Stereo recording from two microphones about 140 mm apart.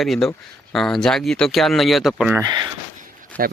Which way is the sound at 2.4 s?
30° right (ahead or behind).